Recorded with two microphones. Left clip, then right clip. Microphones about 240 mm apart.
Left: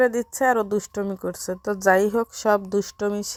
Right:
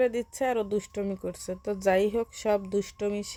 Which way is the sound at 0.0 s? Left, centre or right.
Centre.